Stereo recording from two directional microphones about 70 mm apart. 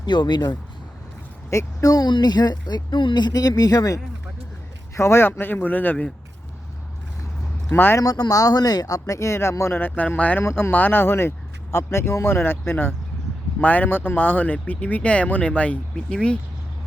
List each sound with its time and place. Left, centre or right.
0.0 s speech: left
1.5 s speech: left
4.9 s speech: left
7.7 s speech: left
7.9 s speech: left
10.4 s speech: left; by 16.4 s centre